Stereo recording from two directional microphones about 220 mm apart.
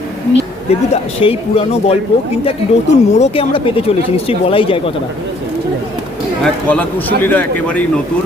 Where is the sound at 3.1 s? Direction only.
30° left (ahead or behind).